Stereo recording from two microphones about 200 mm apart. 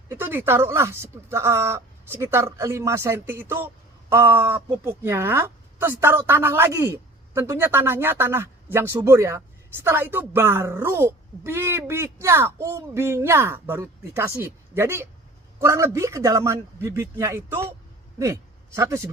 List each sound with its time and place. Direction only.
0.1 s a man's voice: 10° right (ahead or behind)